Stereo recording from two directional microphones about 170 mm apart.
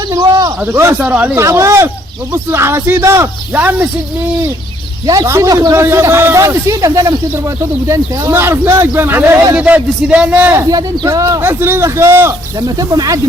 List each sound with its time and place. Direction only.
0.1 s a man's voice: 20° right (ahead or behind)
5.0 s a man's voice: 20° right (ahead or behind)